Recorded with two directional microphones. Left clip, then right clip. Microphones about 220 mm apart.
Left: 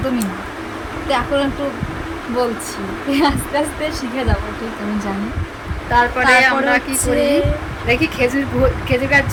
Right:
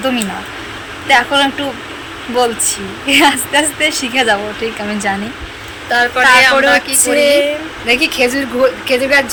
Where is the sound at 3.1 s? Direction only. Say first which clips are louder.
Right 7 dB; 25° right (ahead or behind).